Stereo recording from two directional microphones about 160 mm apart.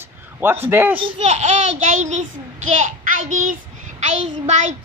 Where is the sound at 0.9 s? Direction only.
35° right (ahead or behind).